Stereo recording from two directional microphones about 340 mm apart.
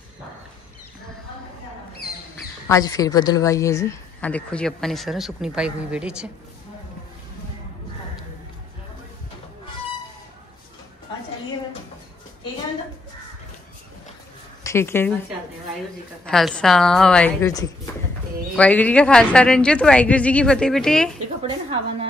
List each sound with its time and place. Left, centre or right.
2.7 s a woman's voice: centre
14.6 s speech: centre
16.3 s a woman's voice: centre
21.4 s a woman's voice: centre